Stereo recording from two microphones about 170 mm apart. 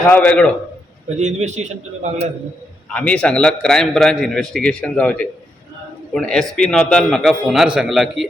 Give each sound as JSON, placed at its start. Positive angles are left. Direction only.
{"t": 0.0, "sound": "a man's voice", "side_deg": 5}
{"t": 1.2, "sound": "a man's voice", "side_deg": -45}
{"t": 2.9, "sound": "a man's voice", "side_deg": 5}